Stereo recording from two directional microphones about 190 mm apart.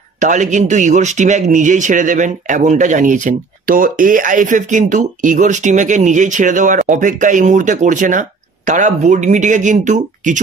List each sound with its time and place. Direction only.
0.2 s speech: 40° right (ahead or behind)